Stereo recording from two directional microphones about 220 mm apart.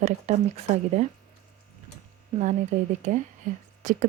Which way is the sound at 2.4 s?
35° right (ahead or behind).